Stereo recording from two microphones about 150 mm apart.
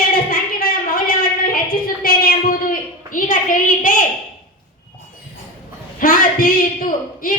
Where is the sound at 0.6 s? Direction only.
75° left (ahead or behind).